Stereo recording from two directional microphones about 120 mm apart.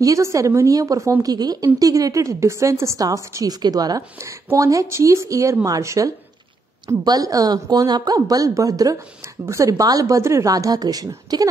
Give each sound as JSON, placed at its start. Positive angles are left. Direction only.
{"t": 0.0, "sound": "a woman's voice", "side_deg": -25}